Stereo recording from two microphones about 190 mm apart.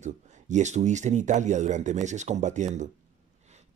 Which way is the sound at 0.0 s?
40° right (ahead or behind).